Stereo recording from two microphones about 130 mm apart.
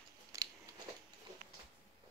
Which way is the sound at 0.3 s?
25° right (ahead or behind).